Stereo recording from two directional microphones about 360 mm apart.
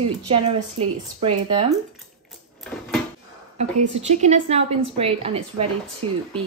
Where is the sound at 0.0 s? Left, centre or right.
Centre.